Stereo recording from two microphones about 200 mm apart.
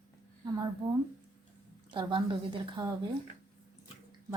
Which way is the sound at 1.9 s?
25° right (ahead or behind).